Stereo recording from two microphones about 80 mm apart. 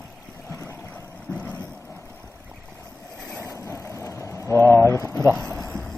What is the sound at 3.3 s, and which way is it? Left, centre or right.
Vehicle, left.